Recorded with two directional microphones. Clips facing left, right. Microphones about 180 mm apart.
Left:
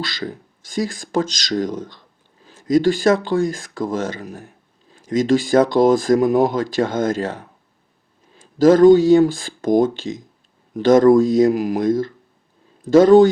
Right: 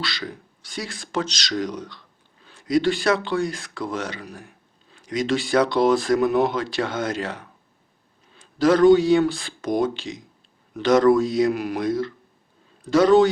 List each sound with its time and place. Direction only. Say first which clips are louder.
0.0 s speech: left 4 dB; 50° left (ahead or behind)
8.5 s speech: left 5 dB; 45° left (ahead or behind)